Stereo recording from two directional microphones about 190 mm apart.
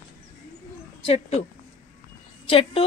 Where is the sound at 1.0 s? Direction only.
35° left (ahead or behind).